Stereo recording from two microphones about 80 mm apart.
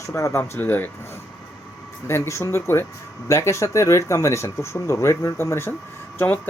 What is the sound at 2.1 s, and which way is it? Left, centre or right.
Speech, left.